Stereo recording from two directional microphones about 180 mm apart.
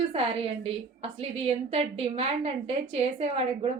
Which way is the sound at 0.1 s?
30° right (ahead or behind).